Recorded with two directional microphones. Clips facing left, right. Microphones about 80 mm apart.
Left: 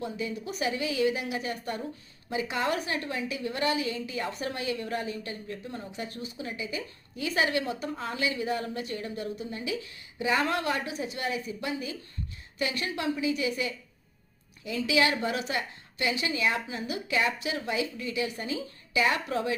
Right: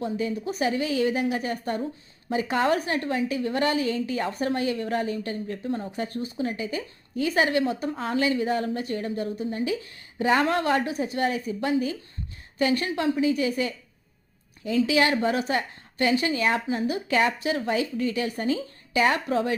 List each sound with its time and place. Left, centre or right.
0.0 s a woman's voice: right